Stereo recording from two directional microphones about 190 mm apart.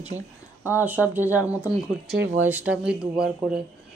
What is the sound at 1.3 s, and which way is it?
Speech, 10° right (ahead or behind).